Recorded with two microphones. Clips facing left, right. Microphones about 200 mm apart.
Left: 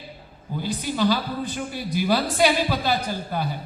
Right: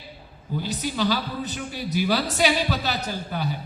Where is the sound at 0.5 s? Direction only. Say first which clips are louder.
Left 1 dB; 50° left (ahead or behind).